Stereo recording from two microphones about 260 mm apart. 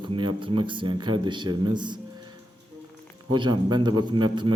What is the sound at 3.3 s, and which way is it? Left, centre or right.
A man's voice, centre.